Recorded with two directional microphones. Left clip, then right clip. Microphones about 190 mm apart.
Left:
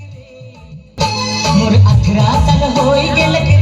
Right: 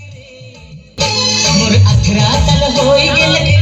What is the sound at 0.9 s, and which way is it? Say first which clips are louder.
Music: right 3 dB; centre (ahead or behind).